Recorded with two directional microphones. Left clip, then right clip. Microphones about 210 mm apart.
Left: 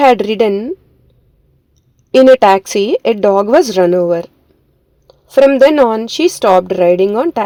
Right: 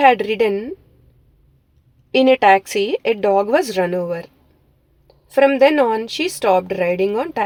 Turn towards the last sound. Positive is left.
turn(degrees=30)  # may be behind; listen again after turning